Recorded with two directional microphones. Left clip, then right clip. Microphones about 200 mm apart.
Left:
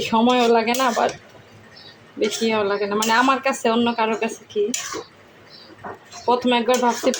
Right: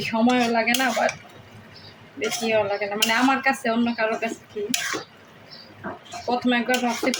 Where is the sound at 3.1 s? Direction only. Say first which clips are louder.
Left 3 dB; 30° left (ahead or behind).